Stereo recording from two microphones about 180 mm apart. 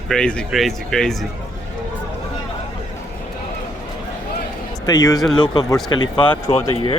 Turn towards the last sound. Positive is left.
turn(degrees=35)  # may be behind; listen again after turning